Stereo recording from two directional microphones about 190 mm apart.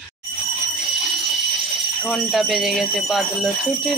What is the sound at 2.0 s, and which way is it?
Speech, centre (ahead or behind).